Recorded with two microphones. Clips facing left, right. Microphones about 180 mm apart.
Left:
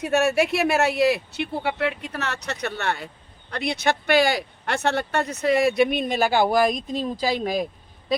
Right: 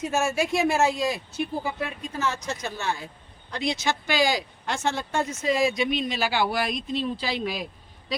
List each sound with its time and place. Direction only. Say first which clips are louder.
0.0 s speech: left 5 dB; 65° left (ahead or behind); by 7.7 s 45° left (ahead or behind)